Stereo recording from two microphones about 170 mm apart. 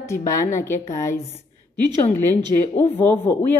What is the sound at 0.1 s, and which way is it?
A woman's voice, 20° left (ahead or behind).